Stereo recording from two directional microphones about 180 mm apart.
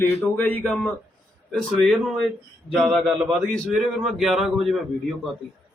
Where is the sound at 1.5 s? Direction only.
Centre (ahead or behind).